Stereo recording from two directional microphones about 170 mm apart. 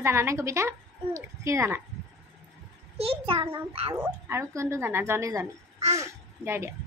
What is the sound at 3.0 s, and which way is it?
Speech, 35° right (ahead or behind).